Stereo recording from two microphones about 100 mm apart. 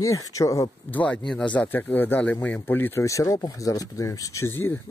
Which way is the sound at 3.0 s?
30° left (ahead or behind).